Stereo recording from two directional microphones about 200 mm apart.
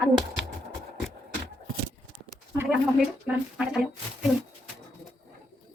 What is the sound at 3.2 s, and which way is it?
Speech, 5° right (ahead or behind).